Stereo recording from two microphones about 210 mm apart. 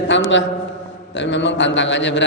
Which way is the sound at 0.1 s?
60° left (ahead or behind).